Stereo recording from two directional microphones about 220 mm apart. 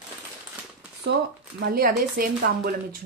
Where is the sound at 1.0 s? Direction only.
50° right (ahead or behind).